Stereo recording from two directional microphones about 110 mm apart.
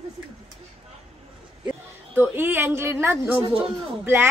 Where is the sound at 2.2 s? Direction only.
20° right (ahead or behind).